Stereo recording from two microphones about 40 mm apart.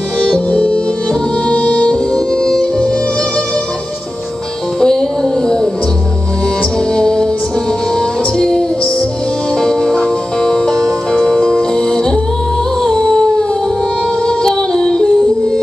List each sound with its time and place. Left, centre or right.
0.2 s music: left
2.1 s music: centre
4.7 s music: centre
6.9 s music: centre
12.9 s a sound: centre